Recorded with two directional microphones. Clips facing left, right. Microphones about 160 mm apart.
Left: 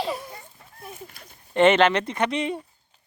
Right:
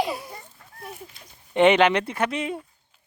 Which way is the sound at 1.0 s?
55° left (ahead or behind).